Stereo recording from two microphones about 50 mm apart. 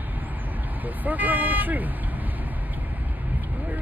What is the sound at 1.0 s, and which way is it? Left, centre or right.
Speech, right.